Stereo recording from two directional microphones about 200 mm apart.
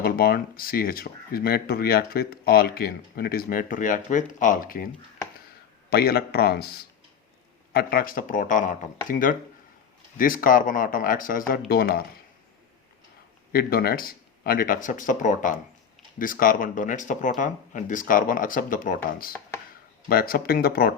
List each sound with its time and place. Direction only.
0.0 s speech: 50° left (ahead or behind)
5.9 s speech: 50° left (ahead or behind)
13.5 s speech: 50° left (ahead or behind)
20.1 s speech: 45° left (ahead or behind)